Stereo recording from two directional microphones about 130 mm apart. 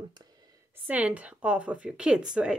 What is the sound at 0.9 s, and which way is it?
Speech, 10° right (ahead or behind).